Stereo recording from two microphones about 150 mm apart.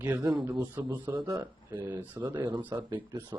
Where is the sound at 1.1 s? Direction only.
30° right (ahead or behind).